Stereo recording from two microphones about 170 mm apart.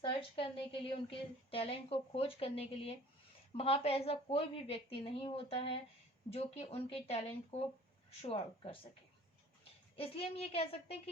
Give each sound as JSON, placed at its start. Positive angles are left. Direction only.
{"t": 0.0, "sound": "a woman's voice", "side_deg": 30}
{"t": 9.9, "sound": "a woman's voice", "side_deg": 35}